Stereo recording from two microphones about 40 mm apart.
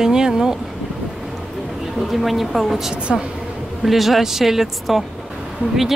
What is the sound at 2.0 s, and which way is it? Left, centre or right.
Speech, centre.